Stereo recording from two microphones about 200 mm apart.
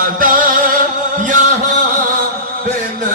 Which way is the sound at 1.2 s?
40° right (ahead or behind).